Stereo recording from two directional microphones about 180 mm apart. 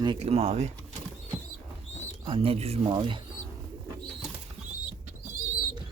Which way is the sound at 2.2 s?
30° right (ahead or behind).